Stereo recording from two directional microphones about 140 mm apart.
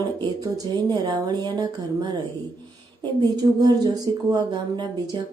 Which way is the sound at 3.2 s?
30° right (ahead or behind).